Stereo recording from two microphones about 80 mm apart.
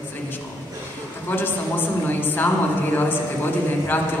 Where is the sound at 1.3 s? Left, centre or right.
Left.